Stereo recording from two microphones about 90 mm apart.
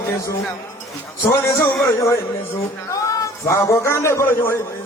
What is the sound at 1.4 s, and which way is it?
A man's voice, 35° left (ahead or behind).